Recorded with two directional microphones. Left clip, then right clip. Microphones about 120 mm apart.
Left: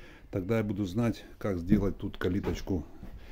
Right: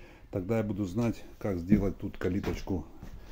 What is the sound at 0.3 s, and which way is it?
Speech, 30° left (ahead or behind).